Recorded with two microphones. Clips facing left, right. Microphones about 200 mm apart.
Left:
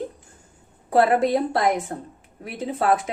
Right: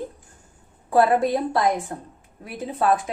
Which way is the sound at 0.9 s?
65° left (ahead or behind).